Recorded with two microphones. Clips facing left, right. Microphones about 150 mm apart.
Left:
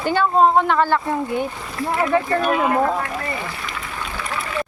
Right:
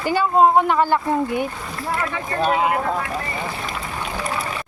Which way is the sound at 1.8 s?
Centre (ahead or behind).